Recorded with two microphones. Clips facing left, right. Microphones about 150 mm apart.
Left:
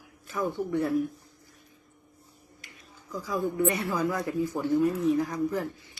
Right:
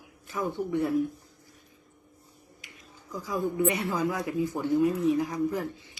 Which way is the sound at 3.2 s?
15° right (ahead or behind).